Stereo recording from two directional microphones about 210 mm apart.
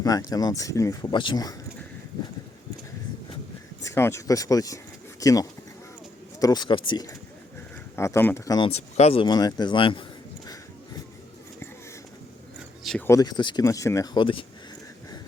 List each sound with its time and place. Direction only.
0.0 s speech: 15° left (ahead or behind)
3.8 s speech: 10° left (ahead or behind)
12.8 s a sound: centre (ahead or behind)
13.1 s speech: 15° left (ahead or behind)